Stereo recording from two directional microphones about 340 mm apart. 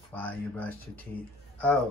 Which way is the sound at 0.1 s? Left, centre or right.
Centre.